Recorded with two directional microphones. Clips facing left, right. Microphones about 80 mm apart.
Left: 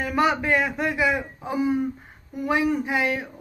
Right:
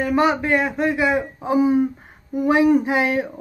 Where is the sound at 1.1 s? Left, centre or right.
Centre.